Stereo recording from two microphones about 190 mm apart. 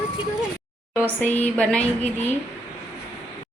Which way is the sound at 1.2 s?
10° left (ahead or behind).